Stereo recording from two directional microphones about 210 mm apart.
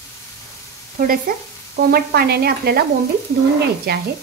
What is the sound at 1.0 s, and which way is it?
Sizzle, 45° right (ahead or behind).